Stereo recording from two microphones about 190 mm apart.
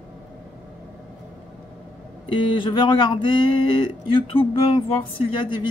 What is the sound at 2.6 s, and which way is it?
Speech, 25° left (ahead or behind).